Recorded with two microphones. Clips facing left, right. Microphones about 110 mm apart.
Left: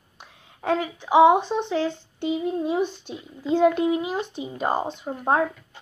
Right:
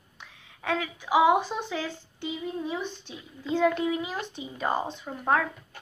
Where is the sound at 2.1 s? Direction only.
60° left (ahead or behind).